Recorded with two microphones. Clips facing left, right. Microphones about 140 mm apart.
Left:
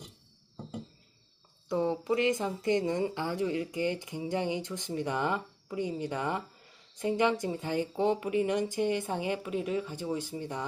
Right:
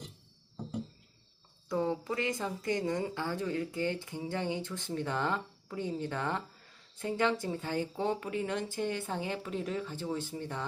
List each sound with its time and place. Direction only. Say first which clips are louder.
1.7 s speech: left 3 dB; 20° left (ahead or behind)